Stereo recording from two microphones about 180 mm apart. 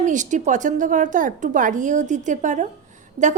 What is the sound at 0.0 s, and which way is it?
A woman's voice, 45° right (ahead or behind).